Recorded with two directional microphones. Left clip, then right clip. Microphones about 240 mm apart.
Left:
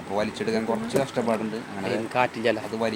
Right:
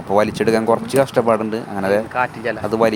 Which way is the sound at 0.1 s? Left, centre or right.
Right.